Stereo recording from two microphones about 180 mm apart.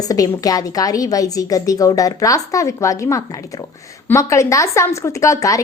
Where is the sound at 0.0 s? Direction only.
20° left (ahead or behind).